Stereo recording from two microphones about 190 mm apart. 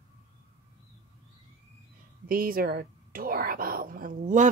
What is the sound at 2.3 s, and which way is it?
Speech, 50° right (ahead or behind).